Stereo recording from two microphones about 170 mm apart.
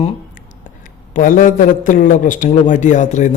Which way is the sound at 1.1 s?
50° left (ahead or behind).